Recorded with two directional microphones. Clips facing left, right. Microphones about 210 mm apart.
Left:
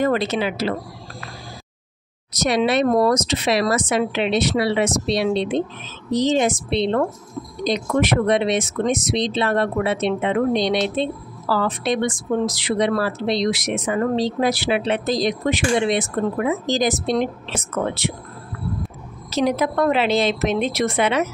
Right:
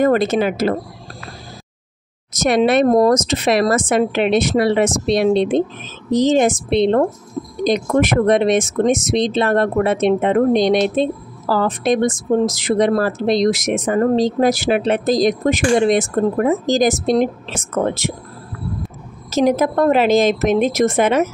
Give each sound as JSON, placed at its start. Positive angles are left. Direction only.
{"t": 0.0, "sound": "speech", "side_deg": -50}
{"t": 2.3, "sound": "speech", "side_deg": -50}
{"t": 19.3, "sound": "speech", "side_deg": -45}